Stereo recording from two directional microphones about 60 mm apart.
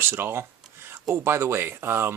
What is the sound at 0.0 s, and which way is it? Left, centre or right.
Speech, right.